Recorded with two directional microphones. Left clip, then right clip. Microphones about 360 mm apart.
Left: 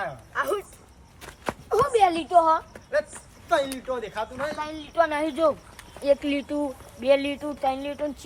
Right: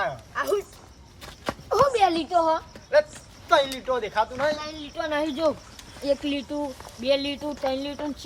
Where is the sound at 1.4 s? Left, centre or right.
Centre.